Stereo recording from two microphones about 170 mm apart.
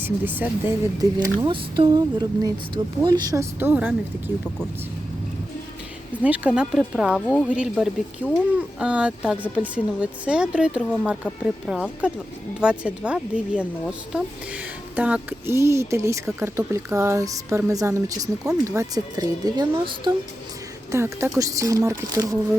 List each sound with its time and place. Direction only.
0.0 s speech: 10° right (ahead or behind)
1.2 s speech: 25° right (ahead or behind); by 3.9 s 10° right (ahead or behind)
6.2 s speech: 10° right (ahead or behind); by 19.9 s 25° right (ahead or behind)
20.9 s speech: 15° right (ahead or behind)